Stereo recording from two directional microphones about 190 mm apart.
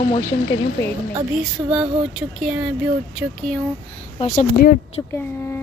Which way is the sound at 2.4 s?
5° right (ahead or behind).